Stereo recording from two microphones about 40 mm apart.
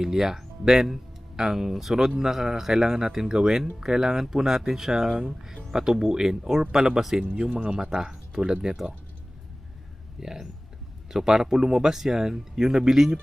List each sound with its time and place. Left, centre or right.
0.0 s speech: centre
7.2 s speech: right
7.8 s speech: centre
10.2 s speech: centre